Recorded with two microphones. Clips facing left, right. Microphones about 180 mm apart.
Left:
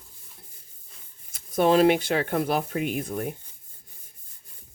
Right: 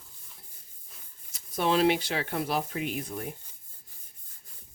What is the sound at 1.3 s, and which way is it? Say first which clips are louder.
Speech: left 6 dB; 50° left (ahead or behind).